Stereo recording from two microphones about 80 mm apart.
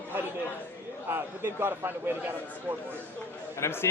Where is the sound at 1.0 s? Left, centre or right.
Right.